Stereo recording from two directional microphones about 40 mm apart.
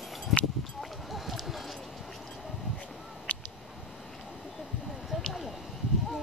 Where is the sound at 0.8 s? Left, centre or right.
Centre.